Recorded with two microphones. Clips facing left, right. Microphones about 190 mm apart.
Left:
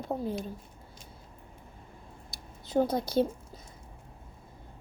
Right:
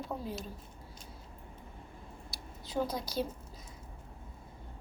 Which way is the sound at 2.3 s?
50° left (ahead or behind).